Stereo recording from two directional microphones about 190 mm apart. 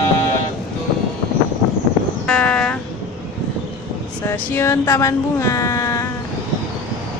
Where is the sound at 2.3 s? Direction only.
5° left (ahead or behind).